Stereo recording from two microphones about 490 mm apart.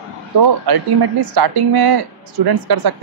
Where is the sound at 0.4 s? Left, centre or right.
Right.